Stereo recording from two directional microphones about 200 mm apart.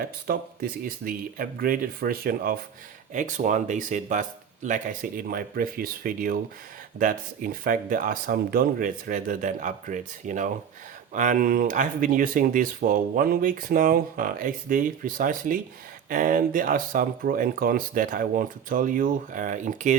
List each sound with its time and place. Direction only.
0.0 s speech: 50° right (ahead or behind)